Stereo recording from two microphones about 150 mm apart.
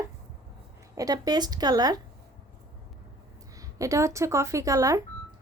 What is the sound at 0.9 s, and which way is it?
Speech, 25° right (ahead or behind).